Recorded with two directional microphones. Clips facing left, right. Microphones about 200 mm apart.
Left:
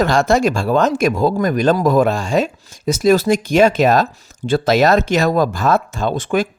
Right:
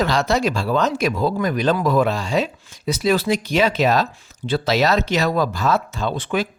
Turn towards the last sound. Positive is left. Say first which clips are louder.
# left 4 dB
turn(degrees=45)  # may be behind; listen again after turning